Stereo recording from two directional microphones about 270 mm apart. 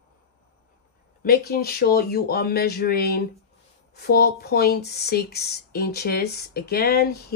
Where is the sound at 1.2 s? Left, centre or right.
Left.